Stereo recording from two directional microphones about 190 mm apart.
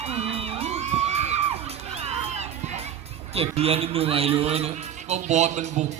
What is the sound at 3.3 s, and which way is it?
A man's voice, 30° right (ahead or behind).